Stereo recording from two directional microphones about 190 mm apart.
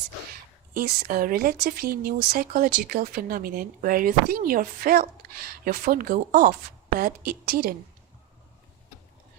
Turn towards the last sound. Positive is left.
turn(degrees=-50)  # may be behind; listen again after turning